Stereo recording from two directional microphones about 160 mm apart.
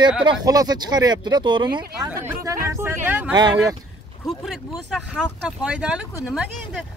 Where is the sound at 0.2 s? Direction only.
25° right (ahead or behind).